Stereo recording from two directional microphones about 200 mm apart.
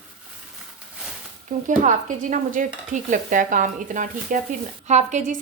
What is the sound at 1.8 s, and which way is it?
Dishes, 40° right (ahead or behind).